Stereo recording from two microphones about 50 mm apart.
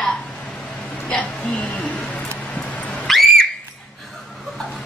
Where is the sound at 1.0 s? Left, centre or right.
Left.